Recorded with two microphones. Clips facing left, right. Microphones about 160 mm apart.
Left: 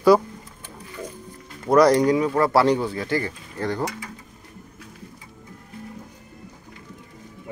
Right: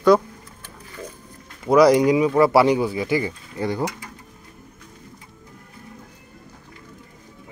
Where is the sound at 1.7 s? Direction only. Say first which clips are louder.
Right 2 dB; 5° right (ahead or behind).